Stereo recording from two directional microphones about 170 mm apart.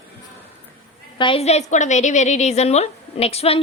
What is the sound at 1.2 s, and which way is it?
A woman's voice, 30° left (ahead or behind).